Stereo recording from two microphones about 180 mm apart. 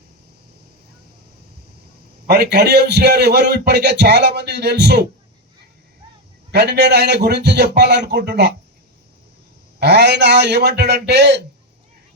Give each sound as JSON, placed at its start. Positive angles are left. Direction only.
{"t": 2.2, "sound": "a man's voice", "side_deg": -65}
{"t": 6.5, "sound": "a man's voice", "side_deg": -70}
{"t": 9.8, "sound": "a man's voice", "side_deg": -70}